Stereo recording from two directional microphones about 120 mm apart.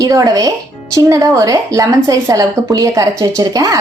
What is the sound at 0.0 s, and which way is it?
A woman's voice, 25° right (ahead or behind).